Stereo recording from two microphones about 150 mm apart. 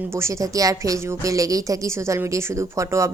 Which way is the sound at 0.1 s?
20° right (ahead or behind).